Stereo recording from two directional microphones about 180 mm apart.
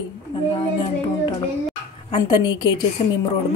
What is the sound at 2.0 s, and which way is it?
Speech, 25° left (ahead or behind).